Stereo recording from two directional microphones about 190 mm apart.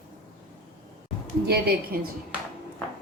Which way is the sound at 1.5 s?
55° right (ahead or behind).